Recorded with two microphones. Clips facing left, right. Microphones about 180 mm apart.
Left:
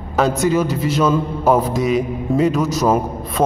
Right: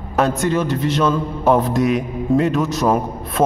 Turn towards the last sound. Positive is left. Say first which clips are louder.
# even
turn(degrees=0)  # may be behind; listen again after turning